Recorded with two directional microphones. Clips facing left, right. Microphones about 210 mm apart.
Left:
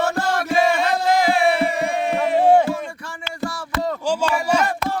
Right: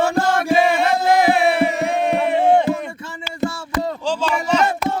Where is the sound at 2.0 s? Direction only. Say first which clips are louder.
Right 3 dB; 60° right (ahead or behind).